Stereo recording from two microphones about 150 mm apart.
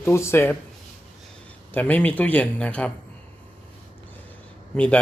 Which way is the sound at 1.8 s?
10° left (ahead or behind).